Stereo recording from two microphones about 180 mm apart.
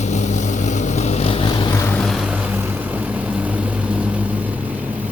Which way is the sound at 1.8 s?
5° left (ahead or behind).